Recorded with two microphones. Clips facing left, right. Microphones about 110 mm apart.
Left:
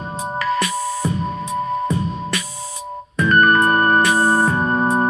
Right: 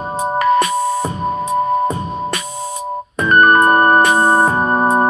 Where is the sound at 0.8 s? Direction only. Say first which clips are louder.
Right 4 dB; 50° right (ahead or behind).